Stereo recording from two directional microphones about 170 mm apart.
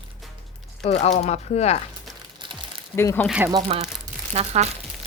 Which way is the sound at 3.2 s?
5° right (ahead or behind).